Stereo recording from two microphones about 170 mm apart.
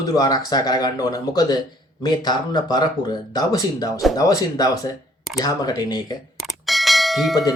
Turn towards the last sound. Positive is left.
turn(degrees=0)  # may be behind; listen again after turning